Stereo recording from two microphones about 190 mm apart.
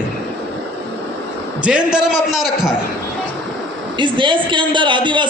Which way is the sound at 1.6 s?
5° right (ahead or behind).